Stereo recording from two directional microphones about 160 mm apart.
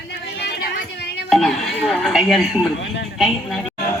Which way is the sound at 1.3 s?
Centre (ahead or behind).